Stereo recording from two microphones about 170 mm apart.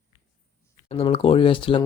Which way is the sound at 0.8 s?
35° left (ahead or behind).